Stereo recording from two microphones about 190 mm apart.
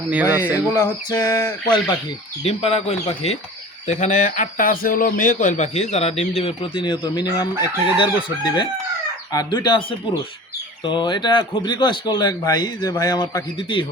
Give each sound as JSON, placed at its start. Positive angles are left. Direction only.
{"t": 0.1, "sound": "speech", "side_deg": -10}
{"t": 0.7, "sound": "a sound", "side_deg": 15}
{"t": 2.4, "sound": "speech", "side_deg": 35}
{"t": 10.8, "sound": "speech", "side_deg": 25}